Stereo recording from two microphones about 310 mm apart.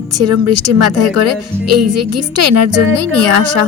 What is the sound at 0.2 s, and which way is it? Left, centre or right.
A woman's voice, right.